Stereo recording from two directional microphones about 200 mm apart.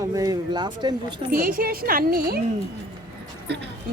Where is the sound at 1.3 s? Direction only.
45° right (ahead or behind).